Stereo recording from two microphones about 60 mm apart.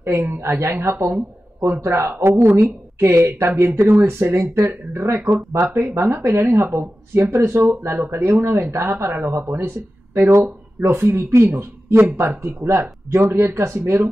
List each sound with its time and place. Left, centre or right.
0.4 s a woman's voice: right
9.1 s speech: right
10.1 s a woman's voice: right